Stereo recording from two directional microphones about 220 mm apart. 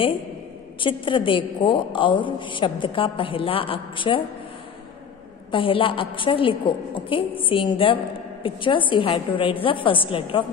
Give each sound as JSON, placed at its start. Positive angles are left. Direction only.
{"t": 0.7, "sound": "a woman's voice", "side_deg": 20}
{"t": 5.5, "sound": "a woman's voice", "side_deg": 25}